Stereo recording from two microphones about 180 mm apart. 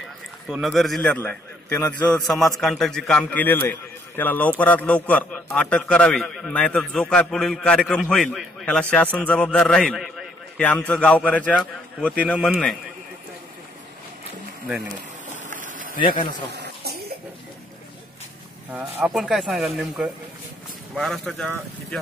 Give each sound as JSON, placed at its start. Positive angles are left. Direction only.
{"t": 0.5, "sound": "a man's voice", "side_deg": 0}
{"t": 15.3, "sound": "a sound", "side_deg": -45}
{"t": 16.0, "sound": "a man's voice", "side_deg": 25}
{"t": 16.5, "sound": "cough", "side_deg": -65}
{"t": 18.7, "sound": "a man's voice", "side_deg": -10}